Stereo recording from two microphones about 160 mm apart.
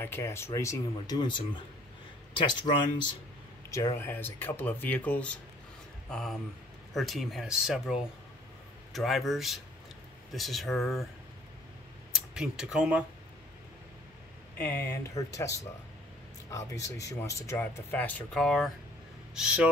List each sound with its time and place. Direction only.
0.0 s speech: 15° left (ahead or behind)
3.7 s speech: 20° left (ahead or behind); by 11.1 s centre (ahead or behind)
12.1 s speech: 5° right (ahead or behind)
14.6 s speech: 15° left (ahead or behind); by 19.7 s 5° right (ahead or behind)